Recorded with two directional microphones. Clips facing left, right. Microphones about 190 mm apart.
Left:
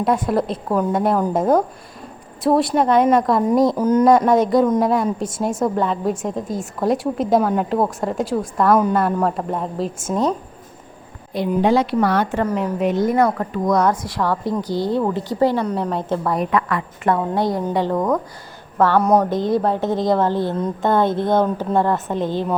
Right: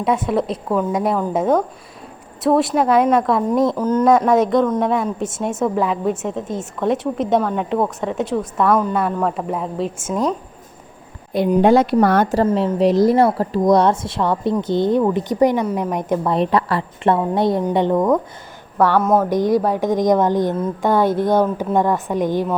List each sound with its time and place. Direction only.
0.0 s a woman's voice: centre (ahead or behind)
3.8 s speech: 10° left (ahead or behind)
4.0 s a woman's voice: centre (ahead or behind)
11.5 s speech: 50° right (ahead or behind)
12.4 s a woman's voice: 30° right (ahead or behind)
17.9 s a woman's voice: centre (ahead or behind)
19.3 s a woman's voice: 15° right (ahead or behind)